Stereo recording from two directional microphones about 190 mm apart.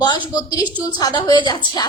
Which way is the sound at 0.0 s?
20° left (ahead or behind).